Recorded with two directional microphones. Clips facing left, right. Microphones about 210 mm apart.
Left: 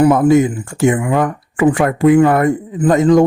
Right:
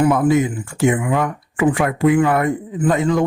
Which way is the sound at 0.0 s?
45° left (ahead or behind).